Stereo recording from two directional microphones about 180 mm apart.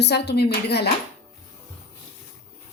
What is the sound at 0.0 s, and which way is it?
Speech, 70° left (ahead or behind).